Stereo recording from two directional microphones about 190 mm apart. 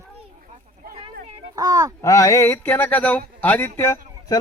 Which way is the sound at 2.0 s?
15° left (ahead or behind).